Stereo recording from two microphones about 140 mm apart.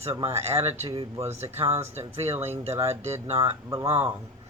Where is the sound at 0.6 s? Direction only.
50° right (ahead or behind).